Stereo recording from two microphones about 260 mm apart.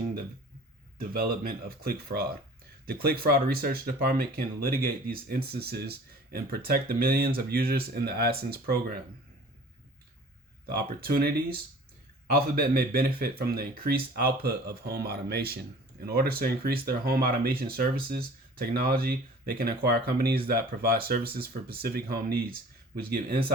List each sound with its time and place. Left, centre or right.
0.9 s speech: right
10.8 s speech: right